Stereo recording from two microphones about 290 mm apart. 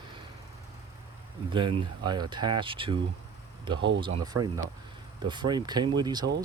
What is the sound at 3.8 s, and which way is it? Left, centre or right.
Speech, right.